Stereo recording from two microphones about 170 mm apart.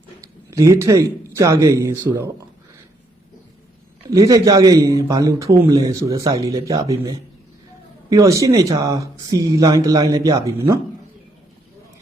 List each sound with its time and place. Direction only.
0.2 s a sound: 20° right (ahead or behind)
1.3 s a man's voice: 20° right (ahead or behind)
4.1 s a man's voice: 20° right (ahead or behind)